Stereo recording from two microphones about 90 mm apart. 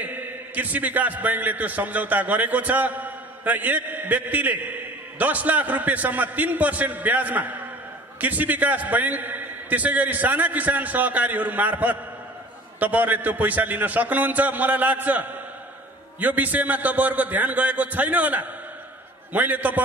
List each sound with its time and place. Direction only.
0.0 s a man's voice: 20° right (ahead or behind)